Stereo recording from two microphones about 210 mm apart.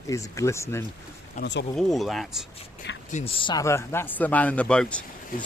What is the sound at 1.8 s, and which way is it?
Speech, centre (ahead or behind).